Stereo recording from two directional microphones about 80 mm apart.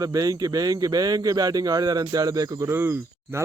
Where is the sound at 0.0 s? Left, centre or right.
Right.